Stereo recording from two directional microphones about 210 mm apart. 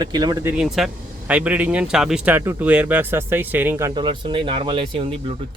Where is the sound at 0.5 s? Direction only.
Centre (ahead or behind).